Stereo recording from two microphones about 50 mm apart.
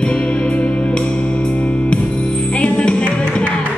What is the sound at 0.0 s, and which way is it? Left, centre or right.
Music, left.